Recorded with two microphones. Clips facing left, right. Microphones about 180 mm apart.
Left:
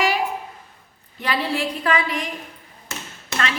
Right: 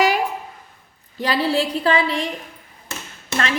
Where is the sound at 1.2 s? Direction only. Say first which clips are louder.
Right 4 dB; 35° right (ahead or behind).